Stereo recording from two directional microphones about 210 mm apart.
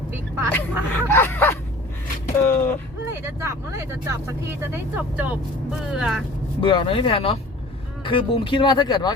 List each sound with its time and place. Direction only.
0.5 s a sound: 10° left (ahead or behind)
3.1 s speech: 10° right (ahead or behind)
6.6 s speech: 25° left (ahead or behind)